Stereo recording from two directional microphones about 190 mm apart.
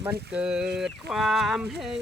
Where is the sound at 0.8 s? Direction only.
Centre (ahead or behind).